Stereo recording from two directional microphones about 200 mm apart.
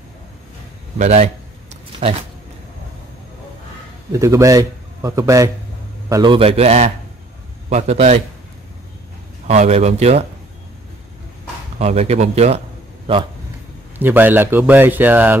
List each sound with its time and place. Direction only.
0.9 s a sound: 35° right (ahead or behind)
4.1 s a man's voice: 15° right (ahead or behind); by 8.2 s 35° right (ahead or behind)
9.5 s speech: 35° right (ahead or behind)
11.8 s a man's voice: 30° right (ahead or behind)
13.9 s a man's voice: 10° right (ahead or behind)